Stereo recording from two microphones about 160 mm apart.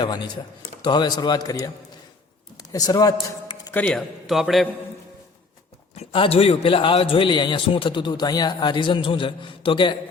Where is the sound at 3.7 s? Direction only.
10° left (ahead or behind).